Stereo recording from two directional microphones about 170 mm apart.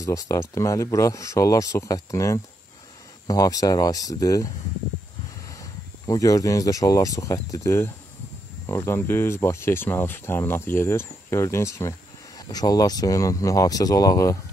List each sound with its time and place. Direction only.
0.0 s speech: 20° left (ahead or behind)
5.6 s speech: 20° left (ahead or behind)